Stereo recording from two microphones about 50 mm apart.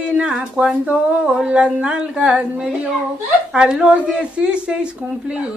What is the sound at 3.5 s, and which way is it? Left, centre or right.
Speech, centre.